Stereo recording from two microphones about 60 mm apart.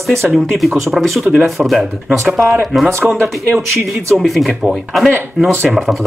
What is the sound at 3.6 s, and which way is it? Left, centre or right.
Speech, centre.